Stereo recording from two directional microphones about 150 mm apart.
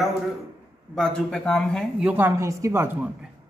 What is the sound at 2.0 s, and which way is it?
Speech, 15° right (ahead or behind).